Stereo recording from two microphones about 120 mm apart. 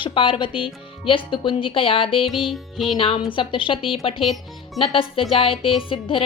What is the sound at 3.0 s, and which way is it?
Speech, 50° left (ahead or behind).